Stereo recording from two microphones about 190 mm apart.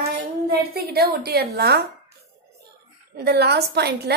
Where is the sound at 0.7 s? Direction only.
55° right (ahead or behind).